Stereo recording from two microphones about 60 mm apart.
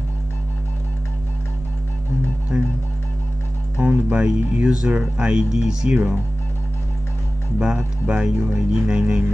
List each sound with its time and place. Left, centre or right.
2.5 s music: centre
3.7 s speech: right
7.5 s speech: centre